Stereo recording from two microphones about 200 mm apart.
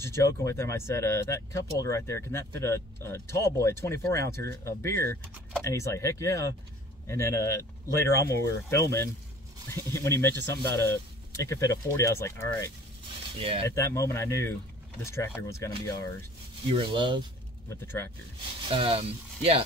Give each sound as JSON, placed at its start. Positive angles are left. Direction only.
{"t": 0.0, "sound": "speech", "side_deg": 15}
{"t": 13.4, "sound": "speech", "side_deg": -25}
{"t": 13.7, "sound": "speech", "side_deg": 15}
{"t": 16.6, "sound": "speech", "side_deg": -25}
{"t": 17.6, "sound": "speech", "side_deg": 10}
{"t": 18.7, "sound": "speech", "side_deg": -30}